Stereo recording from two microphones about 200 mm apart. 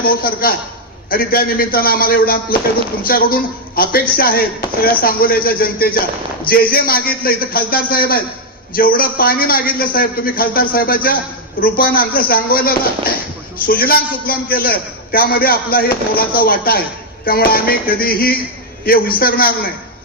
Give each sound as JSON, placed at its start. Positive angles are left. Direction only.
{"t": 0.0, "sound": "a man's voice", "side_deg": 50}